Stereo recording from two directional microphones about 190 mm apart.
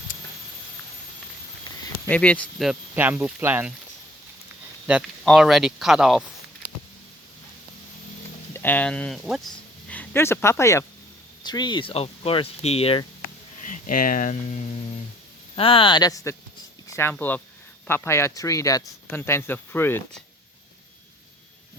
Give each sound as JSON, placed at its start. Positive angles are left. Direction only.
{"t": 2.0, "sound": "speech", "side_deg": 5}
{"t": 4.9, "sound": "speech", "side_deg": -5}
{"t": 8.5, "sound": "speech", "side_deg": 10}
{"t": 13.7, "sound": "speech", "side_deg": 45}